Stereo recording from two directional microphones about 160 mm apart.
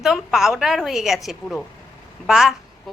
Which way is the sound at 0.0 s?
Centre (ahead or behind).